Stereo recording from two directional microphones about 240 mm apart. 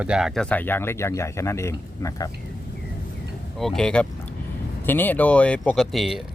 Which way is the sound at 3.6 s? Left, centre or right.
Centre.